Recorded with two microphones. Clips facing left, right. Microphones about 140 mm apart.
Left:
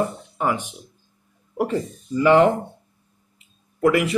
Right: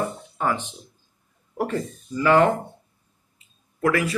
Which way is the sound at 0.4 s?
15° left (ahead or behind).